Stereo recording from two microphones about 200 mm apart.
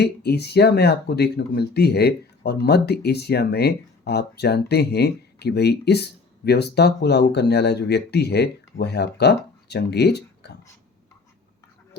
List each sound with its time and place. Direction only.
0.0 s speech: 55° left (ahead or behind)